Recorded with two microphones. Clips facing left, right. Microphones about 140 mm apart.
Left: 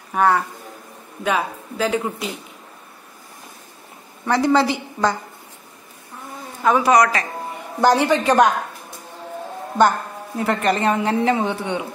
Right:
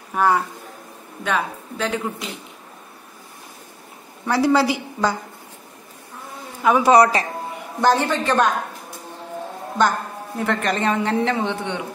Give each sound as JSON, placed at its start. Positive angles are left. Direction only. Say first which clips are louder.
{"t": 0.1, "sound": "speech", "louder": "left 1 dB", "side_deg": 0}
{"t": 4.3, "sound": "speech", "louder": "even", "side_deg": -5}
{"t": 6.8, "sound": "speech", "louder": "right 4 dB", "side_deg": -30}
{"t": 7.8, "sound": "a woman's voice", "louder": "left 2 dB", "side_deg": 15}
{"t": 9.8, "sound": "a woman's voice", "louder": "left 3 dB", "side_deg": 5}